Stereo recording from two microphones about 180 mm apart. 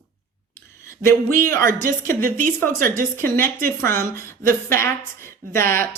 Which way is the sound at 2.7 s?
50° right (ahead or behind).